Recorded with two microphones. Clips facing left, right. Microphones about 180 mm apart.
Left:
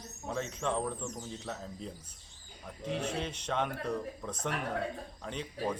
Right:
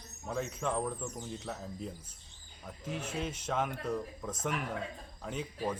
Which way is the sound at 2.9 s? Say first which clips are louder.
Left 5 dB; 35° left (ahead or behind).